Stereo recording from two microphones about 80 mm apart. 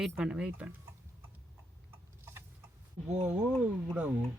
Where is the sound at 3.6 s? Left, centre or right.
Centre.